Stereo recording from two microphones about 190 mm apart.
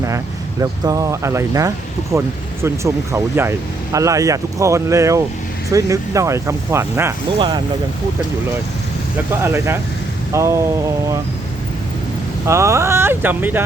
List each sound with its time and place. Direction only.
0.6 s speech: 20° right (ahead or behind)
7.3 s speech: 25° right (ahead or behind)
9.3 s speech: 15° right (ahead or behind)
12.5 s speech: 15° right (ahead or behind)